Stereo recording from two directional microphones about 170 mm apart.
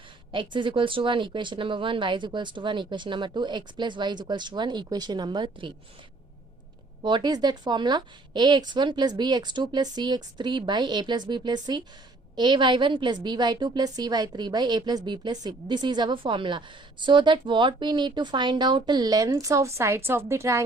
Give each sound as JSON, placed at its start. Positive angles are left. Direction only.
{"t": 0.3, "sound": "a woman's voice", "side_deg": -30}
{"t": 7.0, "sound": "a woman's voice", "side_deg": -25}